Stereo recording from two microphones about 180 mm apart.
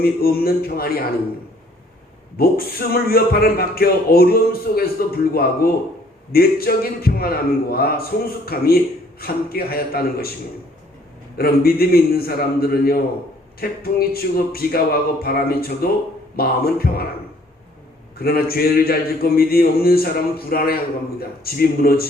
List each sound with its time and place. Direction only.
0.0 s a man's voice: 55° left (ahead or behind)
2.4 s a man's voice: 55° left (ahead or behind)
11.3 s a man's voice: 55° left (ahead or behind)
18.2 s a man's voice: 55° left (ahead or behind)